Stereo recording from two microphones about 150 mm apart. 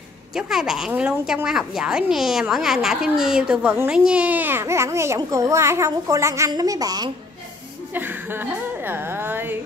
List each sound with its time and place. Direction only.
0.3 s a woman's voice: 5° right (ahead or behind); by 7.1 s 25° right (ahead or behind)
7.9 s a woman's voice: 15° right (ahead or behind)